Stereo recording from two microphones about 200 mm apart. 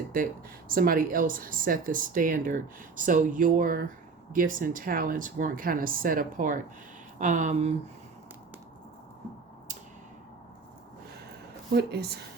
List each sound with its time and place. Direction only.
0.7 s speech: 45° right (ahead or behind)
11.7 s speech: 55° right (ahead or behind)